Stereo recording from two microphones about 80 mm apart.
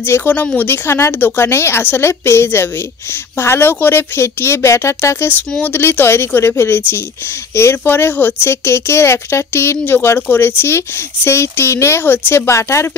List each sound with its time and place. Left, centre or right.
0.0 s speech: left
5.5 s speech: left